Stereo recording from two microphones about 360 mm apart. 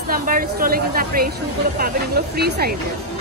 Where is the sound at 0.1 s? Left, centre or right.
Right.